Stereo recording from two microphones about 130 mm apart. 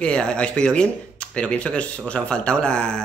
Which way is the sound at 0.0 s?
5° left (ahead or behind).